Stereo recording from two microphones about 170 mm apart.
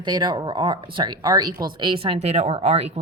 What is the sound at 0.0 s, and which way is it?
Speech, 25° right (ahead or behind).